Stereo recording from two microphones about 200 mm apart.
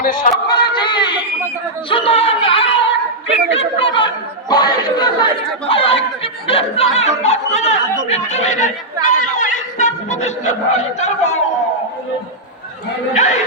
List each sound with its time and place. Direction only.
0.0 s speech: 45° left (ahead or behind)
0.4 s speech: 20° left (ahead or behind)